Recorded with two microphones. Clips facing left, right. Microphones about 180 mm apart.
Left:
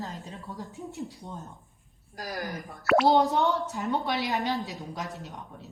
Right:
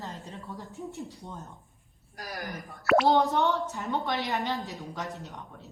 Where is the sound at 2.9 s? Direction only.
Centre (ahead or behind).